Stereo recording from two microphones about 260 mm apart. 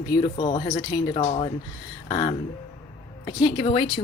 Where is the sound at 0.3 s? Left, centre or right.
Centre.